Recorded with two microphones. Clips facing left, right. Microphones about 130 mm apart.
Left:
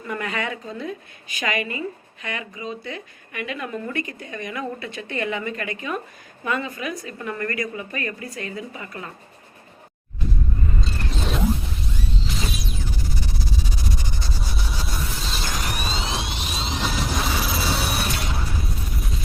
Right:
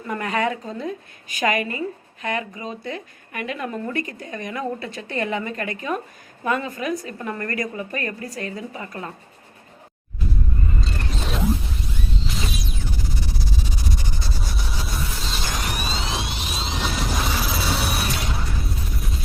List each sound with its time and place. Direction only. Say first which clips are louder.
0.1 s a woman's voice: right 4 dB; 40° right (ahead or behind)
10.8 s a sound: even; centre (ahead or behind)
14.5 s vehicle: even; centre (ahead or behind)